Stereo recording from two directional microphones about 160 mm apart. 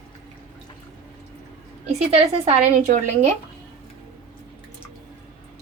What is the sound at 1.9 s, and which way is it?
Speech, 40° right (ahead or behind).